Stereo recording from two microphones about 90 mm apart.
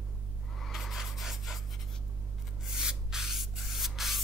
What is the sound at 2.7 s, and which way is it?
Rub, 5° right (ahead or behind).